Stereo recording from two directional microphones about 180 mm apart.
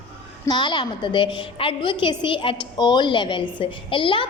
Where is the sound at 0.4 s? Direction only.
25° left (ahead or behind).